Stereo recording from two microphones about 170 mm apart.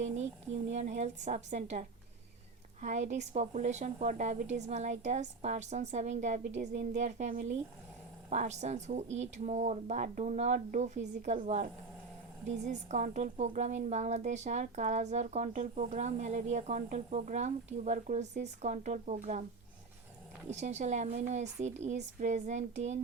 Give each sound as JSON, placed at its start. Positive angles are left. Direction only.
{"t": 0.7, "sound": "a woman's voice", "side_deg": -40}
{"t": 2.8, "sound": "a woman's voice", "side_deg": -45}
{"t": 20.5, "sound": "a woman's voice", "side_deg": -40}